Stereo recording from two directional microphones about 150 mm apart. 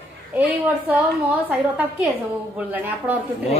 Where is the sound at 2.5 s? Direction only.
10° right (ahead or behind).